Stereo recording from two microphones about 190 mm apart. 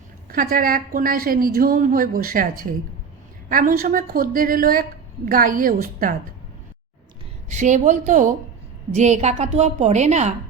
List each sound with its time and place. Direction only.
0.3 s a woman's voice: 50° right (ahead or behind)
7.4 s a woman's voice: 40° right (ahead or behind)